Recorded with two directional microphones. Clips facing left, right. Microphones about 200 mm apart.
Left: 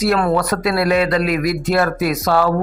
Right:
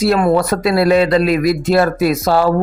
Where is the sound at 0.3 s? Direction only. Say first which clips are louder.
Right 4 dB; 25° right (ahead or behind).